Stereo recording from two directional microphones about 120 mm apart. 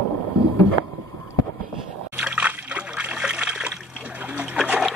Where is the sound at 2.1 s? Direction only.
10° right (ahead or behind).